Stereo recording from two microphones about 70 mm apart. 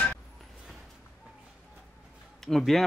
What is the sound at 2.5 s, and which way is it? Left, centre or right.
Speech, centre.